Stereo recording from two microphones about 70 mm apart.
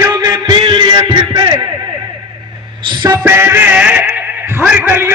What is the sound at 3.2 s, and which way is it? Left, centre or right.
Speech, right.